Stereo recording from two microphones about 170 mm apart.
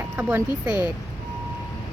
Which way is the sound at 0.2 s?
10° right (ahead or behind).